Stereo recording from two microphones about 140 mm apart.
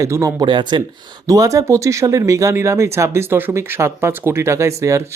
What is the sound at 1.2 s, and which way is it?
Speech, 25° right (ahead or behind).